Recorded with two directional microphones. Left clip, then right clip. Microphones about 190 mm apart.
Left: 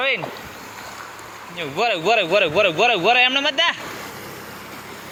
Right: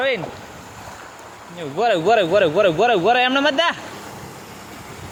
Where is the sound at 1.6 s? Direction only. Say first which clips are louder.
Right 2 dB; 25° right (ahead or behind).